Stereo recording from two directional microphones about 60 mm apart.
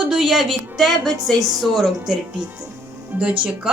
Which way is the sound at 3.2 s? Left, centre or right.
Centre.